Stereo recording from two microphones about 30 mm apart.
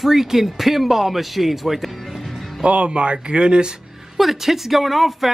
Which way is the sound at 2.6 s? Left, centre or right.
Right.